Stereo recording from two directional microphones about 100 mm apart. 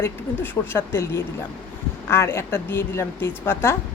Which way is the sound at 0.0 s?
25° left (ahead or behind).